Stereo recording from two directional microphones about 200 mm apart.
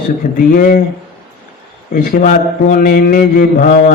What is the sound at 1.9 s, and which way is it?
A man's voice, 40° left (ahead or behind).